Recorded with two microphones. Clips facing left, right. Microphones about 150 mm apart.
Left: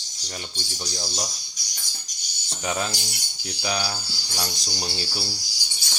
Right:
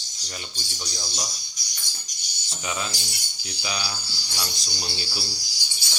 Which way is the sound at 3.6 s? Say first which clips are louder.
Left 5 dB; 45° left (ahead or behind).